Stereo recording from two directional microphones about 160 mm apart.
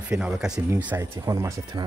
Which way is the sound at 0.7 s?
15° right (ahead or behind).